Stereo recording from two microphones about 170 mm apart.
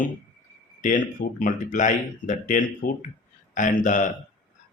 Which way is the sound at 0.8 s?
50° left (ahead or behind).